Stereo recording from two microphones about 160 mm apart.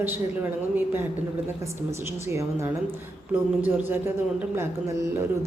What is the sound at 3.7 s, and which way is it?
Speech, 15° right (ahead or behind).